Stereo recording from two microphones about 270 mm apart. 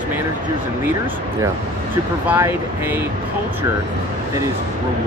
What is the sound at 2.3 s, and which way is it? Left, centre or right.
Speech, centre.